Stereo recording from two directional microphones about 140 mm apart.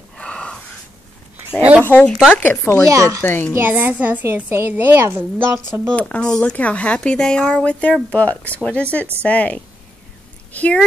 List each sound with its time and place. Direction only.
0.2 s a sound: 5° left (ahead or behind)
1.6 s a woman's voice: 10° right (ahead or behind)
1.9 s speech: 10° left (ahead or behind)
2.1 s speech: 5° right (ahead or behind)
2.4 s speech: 15° left (ahead or behind)
2.9 s speech: 20° right (ahead or behind)
3.2 s speech: 15° left (ahead or behind)
3.5 s a woman's voice: 15° right (ahead or behind)
5.9 s speech: 10° left (ahead or behind)